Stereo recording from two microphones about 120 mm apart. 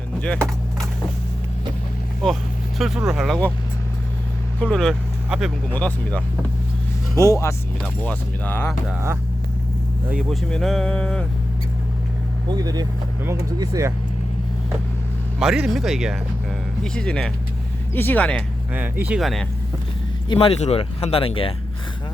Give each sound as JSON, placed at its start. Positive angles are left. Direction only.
{"t": 0.2, "sound": "speech", "side_deg": 10}
{"t": 2.2, "sound": "speech", "side_deg": 0}
{"t": 4.6, "sound": "speech", "side_deg": 5}
{"t": 7.2, "sound": "speech", "side_deg": 25}
{"t": 8.0, "sound": "speech", "side_deg": 15}
{"t": 10.2, "sound": "speech", "side_deg": 0}
{"t": 12.5, "sound": "speech", "side_deg": -35}
{"t": 15.4, "sound": "speech", "side_deg": -5}
{"t": 16.8, "sound": "speech", "side_deg": 5}
{"t": 18.7, "sound": "speech", "side_deg": -15}
{"t": 19.2, "sound": "speech", "side_deg": 0}
{"t": 20.2, "sound": "speech", "side_deg": 40}
{"t": 20.5, "sound": "speech", "side_deg": 60}